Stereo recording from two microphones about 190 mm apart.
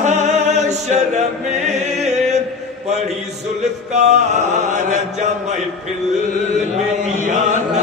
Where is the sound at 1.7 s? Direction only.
35° right (ahead or behind).